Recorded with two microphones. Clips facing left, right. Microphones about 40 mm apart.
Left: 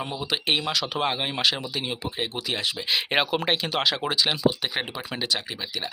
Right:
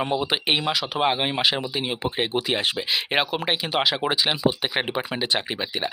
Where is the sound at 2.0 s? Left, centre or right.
Right.